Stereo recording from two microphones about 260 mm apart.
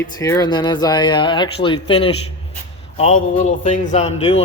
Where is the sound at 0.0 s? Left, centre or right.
Centre.